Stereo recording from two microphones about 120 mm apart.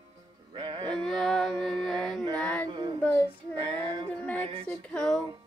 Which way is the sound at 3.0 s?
15° left (ahead or behind).